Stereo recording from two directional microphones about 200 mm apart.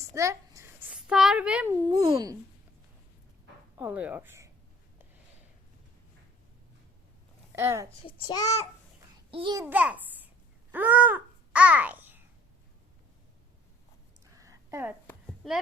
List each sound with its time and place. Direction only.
0.0 s a sound: 15° right (ahead or behind)
1.7 s a child's voice: 20° right (ahead or behind)
3.8 s speech: 10° right (ahead or behind)
7.5 s a woman's voice: 15° right (ahead or behind)
8.0 s a child's voice: 20° left (ahead or behind)
9.3 s a child's voice: 20° right (ahead or behind)
14.3 s a sound: 15° right (ahead or behind)